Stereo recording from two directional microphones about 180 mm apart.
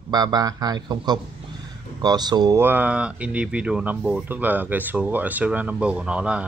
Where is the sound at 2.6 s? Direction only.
10° right (ahead or behind).